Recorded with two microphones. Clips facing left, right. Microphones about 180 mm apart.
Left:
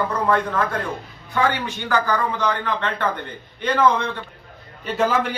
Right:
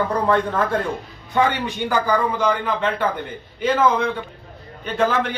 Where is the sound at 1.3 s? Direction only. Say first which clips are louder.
Right 2 dB; 20° right (ahead or behind).